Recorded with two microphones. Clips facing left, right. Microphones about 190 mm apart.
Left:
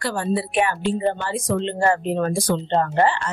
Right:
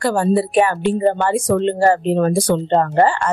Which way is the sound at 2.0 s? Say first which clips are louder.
Right 6 dB; 30° right (ahead or behind).